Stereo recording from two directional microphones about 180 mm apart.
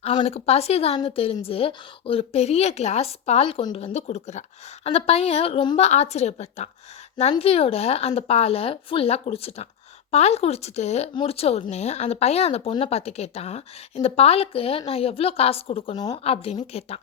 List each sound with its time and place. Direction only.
0.0 s speech: 30° left (ahead or behind)